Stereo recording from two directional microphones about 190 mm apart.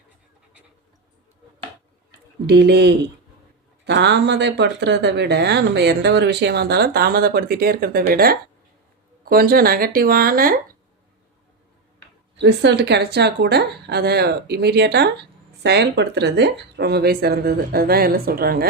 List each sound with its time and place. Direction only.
2.5 s a woman's voice: 60° right (ahead or behind)
12.4 s a woman's voice: 65° right (ahead or behind)